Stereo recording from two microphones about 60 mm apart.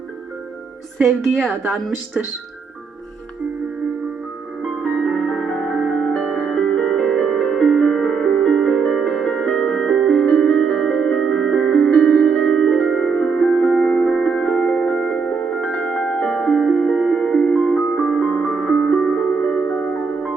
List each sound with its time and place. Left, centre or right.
0.9 s a woman's voice: centre
4.8 s music: centre